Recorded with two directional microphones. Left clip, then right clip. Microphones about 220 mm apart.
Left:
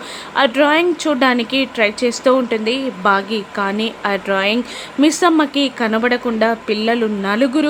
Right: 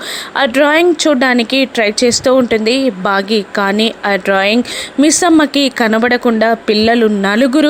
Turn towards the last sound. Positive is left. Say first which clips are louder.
# right 5 dB
turn(degrees=-30)  # may be behind; listen again after turning